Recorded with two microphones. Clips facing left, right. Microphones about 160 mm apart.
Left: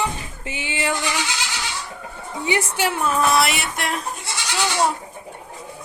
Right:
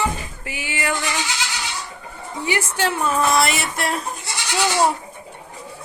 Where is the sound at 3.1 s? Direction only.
Centre (ahead or behind).